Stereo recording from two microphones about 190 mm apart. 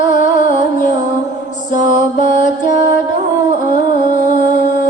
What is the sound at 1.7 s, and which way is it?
Music, 45° left (ahead or behind).